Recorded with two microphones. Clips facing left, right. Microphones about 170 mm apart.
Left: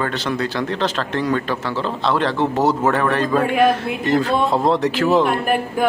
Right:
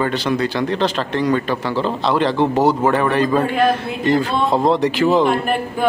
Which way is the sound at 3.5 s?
10° left (ahead or behind).